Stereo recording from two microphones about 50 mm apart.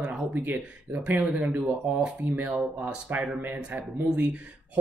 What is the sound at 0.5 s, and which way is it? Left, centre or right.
Speech, right.